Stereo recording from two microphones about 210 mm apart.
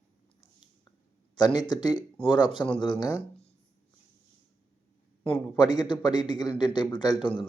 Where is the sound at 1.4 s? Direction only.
20° left (ahead or behind).